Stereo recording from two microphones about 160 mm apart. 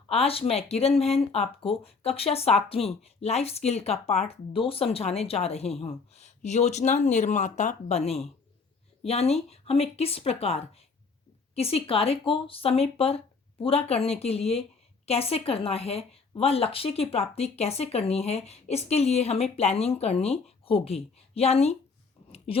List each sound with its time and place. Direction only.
0.1 s speech: 40° left (ahead or behind)